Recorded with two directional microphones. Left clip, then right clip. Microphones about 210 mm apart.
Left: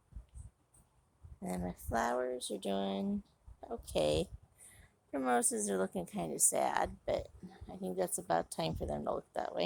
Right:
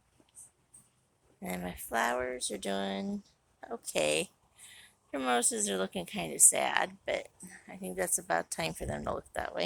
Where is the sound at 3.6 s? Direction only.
5° left (ahead or behind).